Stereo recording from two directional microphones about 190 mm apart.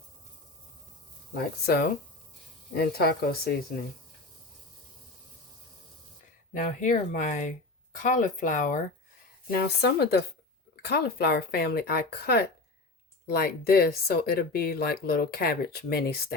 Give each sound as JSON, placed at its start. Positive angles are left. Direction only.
{"t": 1.4, "sound": "speech", "side_deg": 55}
{"t": 6.5, "sound": "speech", "side_deg": 45}
{"t": 9.5, "sound": "speech", "side_deg": 60}